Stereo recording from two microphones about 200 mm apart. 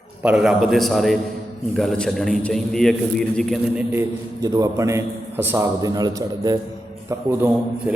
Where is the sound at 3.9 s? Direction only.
15° right (ahead or behind).